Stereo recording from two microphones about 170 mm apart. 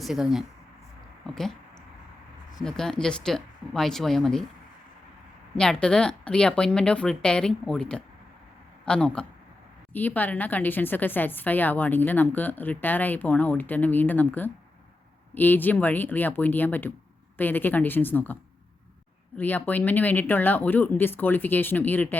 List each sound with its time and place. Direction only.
0.0 s a woman's voice: centre (ahead or behind)
2.6 s a woman's voice: 5° left (ahead or behind)
5.5 s a woman's voice: 5° left (ahead or behind)
19.4 s a woman's voice: 10° left (ahead or behind)